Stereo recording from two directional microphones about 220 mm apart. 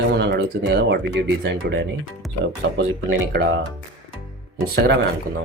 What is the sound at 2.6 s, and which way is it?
Speech, 50° right (ahead or behind).